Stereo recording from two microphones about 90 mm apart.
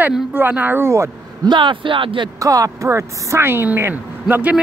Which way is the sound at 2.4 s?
40° right (ahead or behind).